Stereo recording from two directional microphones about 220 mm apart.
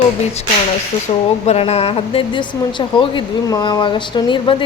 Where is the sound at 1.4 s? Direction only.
30° left (ahead or behind).